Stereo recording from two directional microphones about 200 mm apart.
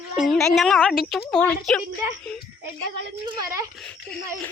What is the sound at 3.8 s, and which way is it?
Speech, 5° left (ahead or behind).